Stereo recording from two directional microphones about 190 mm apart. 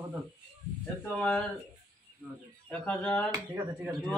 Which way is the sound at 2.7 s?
5° left (ahead or behind).